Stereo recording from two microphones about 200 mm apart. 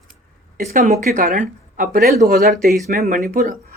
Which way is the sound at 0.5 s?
45° right (ahead or behind).